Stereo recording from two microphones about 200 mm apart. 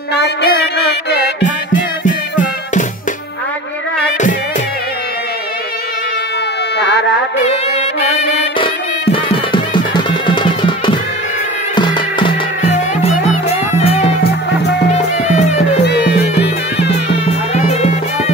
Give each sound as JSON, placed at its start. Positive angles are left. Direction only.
{"t": 0.1, "sound": "music", "side_deg": 55}
{"t": 1.7, "sound": "music", "side_deg": 40}
{"t": 6.8, "sound": "music", "side_deg": 60}
{"t": 7.4, "sound": "music", "side_deg": 35}
{"t": 12.7, "sound": "music", "side_deg": 35}
{"t": 16.7, "sound": "music", "side_deg": 60}
{"t": 17.3, "sound": "music", "side_deg": 35}